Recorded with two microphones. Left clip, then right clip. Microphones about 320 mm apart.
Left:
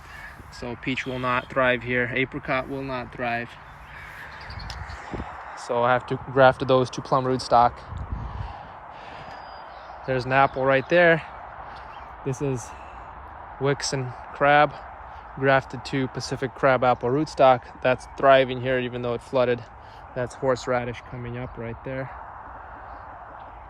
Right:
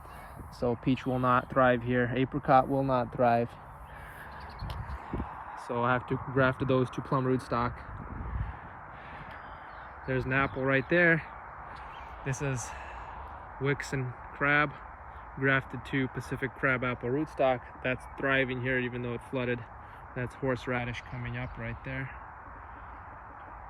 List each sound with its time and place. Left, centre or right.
0.6 s speech: centre
5.7 s speech: centre
10.1 s speech: centre